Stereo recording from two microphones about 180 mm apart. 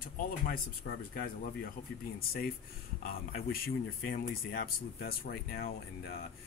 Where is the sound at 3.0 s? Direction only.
55° left (ahead or behind).